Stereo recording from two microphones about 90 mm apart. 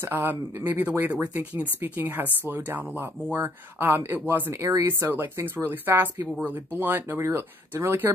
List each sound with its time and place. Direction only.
0.0 s speech: 20° right (ahead or behind)